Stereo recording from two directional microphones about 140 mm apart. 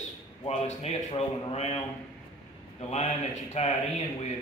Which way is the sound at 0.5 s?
50° left (ahead or behind).